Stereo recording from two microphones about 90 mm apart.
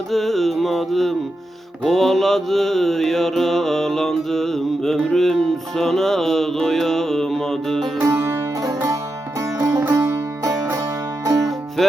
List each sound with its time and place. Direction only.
0.1 s mantra: centre (ahead or behind)
8.0 s music: 25° right (ahead or behind)
11.8 s mantra: centre (ahead or behind)